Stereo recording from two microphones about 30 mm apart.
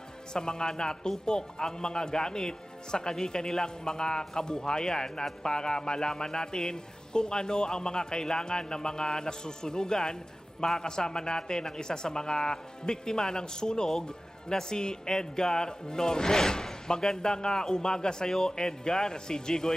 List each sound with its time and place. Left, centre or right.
0.3 s speech: left